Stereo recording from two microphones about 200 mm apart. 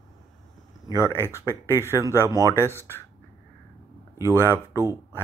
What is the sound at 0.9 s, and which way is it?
Speech, 15° left (ahead or behind).